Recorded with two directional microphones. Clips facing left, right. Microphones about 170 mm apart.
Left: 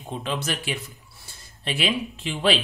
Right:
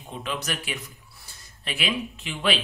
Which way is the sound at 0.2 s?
30° left (ahead or behind).